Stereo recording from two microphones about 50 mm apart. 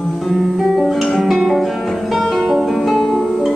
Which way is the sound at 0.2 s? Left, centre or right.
Centre.